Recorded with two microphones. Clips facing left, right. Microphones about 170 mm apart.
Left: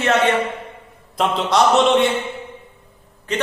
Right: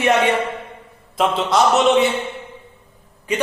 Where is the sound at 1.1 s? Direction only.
Centre (ahead or behind).